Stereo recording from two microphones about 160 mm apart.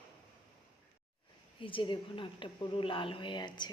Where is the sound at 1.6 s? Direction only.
30° left (ahead or behind).